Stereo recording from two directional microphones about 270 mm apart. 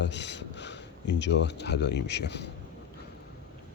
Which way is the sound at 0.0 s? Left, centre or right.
Left.